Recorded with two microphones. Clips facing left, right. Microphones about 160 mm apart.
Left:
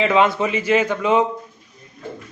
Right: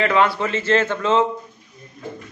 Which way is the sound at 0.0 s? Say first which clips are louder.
Left 2 dB; 20° left (ahead or behind).